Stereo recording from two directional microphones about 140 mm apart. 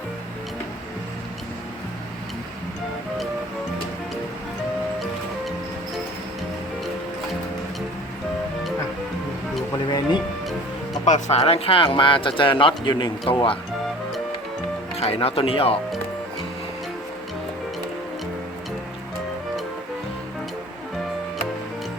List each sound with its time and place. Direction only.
11.0 s speech: 55° left (ahead or behind); by 13.6 s 40° left (ahead or behind)
14.9 s speech: 45° left (ahead or behind)